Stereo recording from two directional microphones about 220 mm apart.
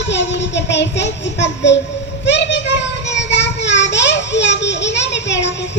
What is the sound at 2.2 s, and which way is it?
Child singing, 55° left (ahead or behind).